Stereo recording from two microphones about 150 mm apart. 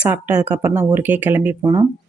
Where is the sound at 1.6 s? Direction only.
20° right (ahead or behind).